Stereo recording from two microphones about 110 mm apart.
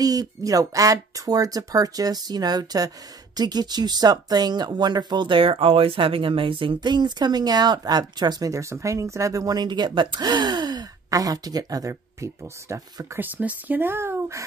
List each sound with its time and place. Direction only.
0.0 s speech: 35° right (ahead or behind)
13.4 s speech: 15° right (ahead or behind)